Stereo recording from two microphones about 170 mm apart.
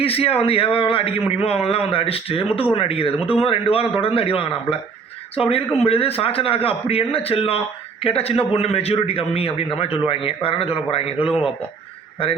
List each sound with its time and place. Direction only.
0.0 s a man's voice: 35° left (ahead or behind)